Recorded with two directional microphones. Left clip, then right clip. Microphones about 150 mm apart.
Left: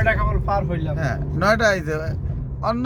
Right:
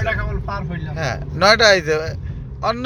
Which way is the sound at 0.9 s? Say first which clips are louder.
Right 8 dB; 20° right (ahead or behind).